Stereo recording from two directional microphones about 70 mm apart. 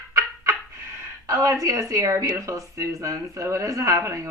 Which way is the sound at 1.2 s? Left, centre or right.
Right.